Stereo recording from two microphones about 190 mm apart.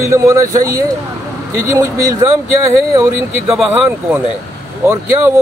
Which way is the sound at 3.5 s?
10° right (ahead or behind).